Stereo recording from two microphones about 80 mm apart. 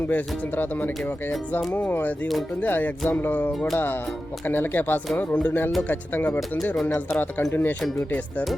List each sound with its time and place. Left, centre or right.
0.1 s speech: left